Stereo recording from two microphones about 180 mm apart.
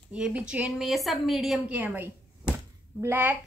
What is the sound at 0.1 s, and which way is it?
A woman's voice, 5° right (ahead or behind).